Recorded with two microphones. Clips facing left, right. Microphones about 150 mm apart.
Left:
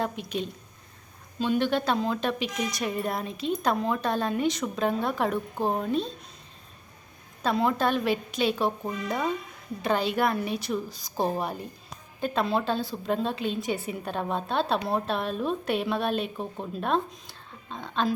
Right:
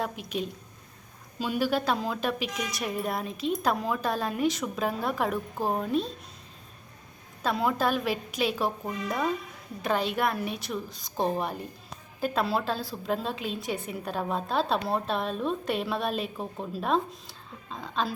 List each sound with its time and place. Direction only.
0.0 s a woman's voice: centre (ahead or behind)
7.4 s a woman's voice: centre (ahead or behind)